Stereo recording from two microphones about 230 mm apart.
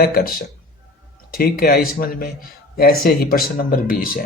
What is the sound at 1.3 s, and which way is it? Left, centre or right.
Speech, left.